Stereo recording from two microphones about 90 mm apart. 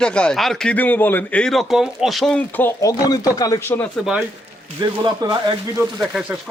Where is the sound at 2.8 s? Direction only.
40° left (ahead or behind).